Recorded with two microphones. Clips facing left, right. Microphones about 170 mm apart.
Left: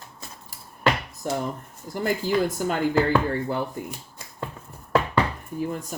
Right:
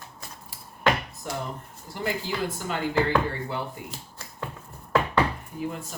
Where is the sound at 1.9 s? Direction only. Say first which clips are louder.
Left 6 dB; 45° left (ahead or behind).